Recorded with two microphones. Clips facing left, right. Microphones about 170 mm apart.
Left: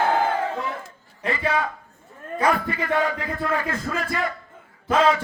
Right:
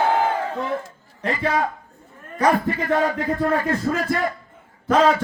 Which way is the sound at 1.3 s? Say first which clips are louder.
Right 2 dB; 40° right (ahead or behind).